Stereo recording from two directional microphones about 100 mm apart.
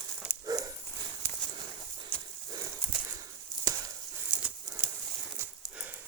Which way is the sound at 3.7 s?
45° right (ahead or behind).